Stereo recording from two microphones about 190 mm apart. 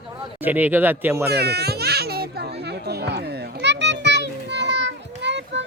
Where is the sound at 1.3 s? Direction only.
60° right (ahead or behind).